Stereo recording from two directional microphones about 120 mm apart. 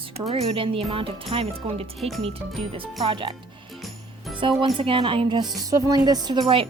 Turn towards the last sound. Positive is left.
turn(degrees=-45)  # may be behind; listen again after turning